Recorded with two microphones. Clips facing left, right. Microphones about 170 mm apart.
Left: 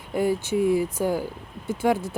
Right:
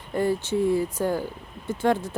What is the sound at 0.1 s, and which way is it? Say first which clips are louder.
A woman's voice: left 1 dB; 10° left (ahead or behind).